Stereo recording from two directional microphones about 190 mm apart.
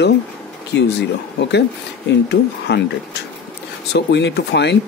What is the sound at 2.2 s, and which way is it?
Speech, 65° left (ahead or behind).